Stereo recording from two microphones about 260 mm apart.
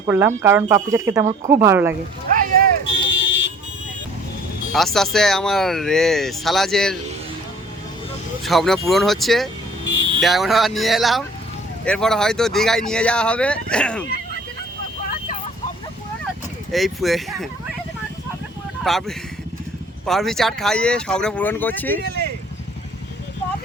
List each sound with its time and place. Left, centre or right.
0.0 s speech: centre
2.8 s fire alarm: left
4.7 s speech: centre
8.4 s speech: centre
16.7 s speech: centre
18.8 s speech: centre
22.0 s speech: right